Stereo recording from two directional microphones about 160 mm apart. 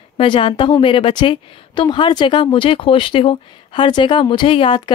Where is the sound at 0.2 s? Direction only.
35° left (ahead or behind).